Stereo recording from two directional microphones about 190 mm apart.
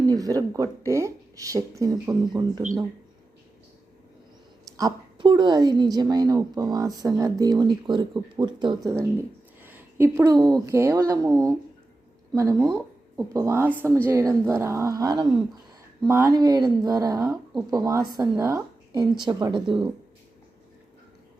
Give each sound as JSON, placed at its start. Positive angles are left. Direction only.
{"t": 0.0, "sound": "a woman's voice", "side_deg": -20}
{"t": 4.8, "sound": "a woman's voice", "side_deg": -20}